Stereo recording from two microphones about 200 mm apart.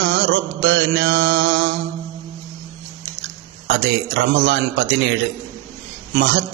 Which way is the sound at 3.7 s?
60° right (ahead or behind).